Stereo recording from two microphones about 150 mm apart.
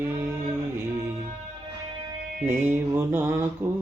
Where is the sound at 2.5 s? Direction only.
15° right (ahead or behind).